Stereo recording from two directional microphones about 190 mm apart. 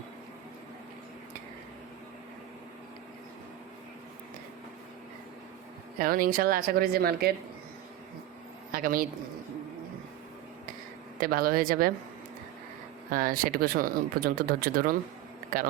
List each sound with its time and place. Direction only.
6.0 s speech: 50° right (ahead or behind)
8.7 s a man's voice: 50° right (ahead or behind)
11.2 s speech: 50° right (ahead or behind)
13.1 s speech: 50° right (ahead or behind)